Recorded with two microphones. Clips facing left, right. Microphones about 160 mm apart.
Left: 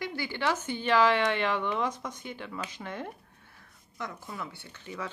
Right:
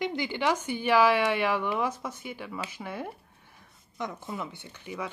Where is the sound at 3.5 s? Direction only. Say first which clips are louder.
Right 4 dB; 20° right (ahead or behind).